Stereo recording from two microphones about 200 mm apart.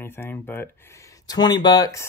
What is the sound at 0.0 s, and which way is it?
Speech, 10° left (ahead or behind).